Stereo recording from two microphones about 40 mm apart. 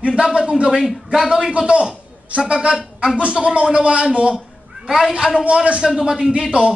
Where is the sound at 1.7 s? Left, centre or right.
Right.